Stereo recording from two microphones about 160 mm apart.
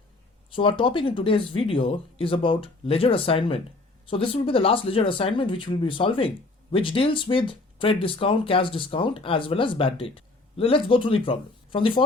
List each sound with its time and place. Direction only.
0.5 s speech: 35° left (ahead or behind)